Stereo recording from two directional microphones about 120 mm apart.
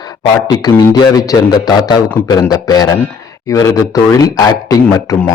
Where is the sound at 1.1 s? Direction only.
30° left (ahead or behind).